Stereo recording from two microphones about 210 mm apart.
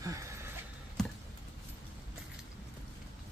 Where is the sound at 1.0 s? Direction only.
Centre (ahead or behind).